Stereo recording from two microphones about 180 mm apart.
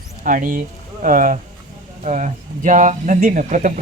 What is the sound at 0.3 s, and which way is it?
Speech, 50° right (ahead or behind).